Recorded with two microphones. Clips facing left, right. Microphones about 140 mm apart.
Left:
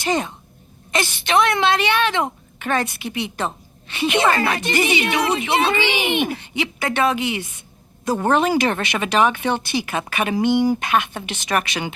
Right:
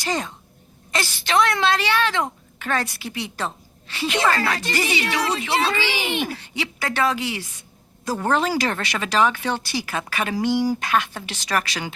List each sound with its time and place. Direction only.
0.0 s a woman's voice: 20° left (ahead or behind)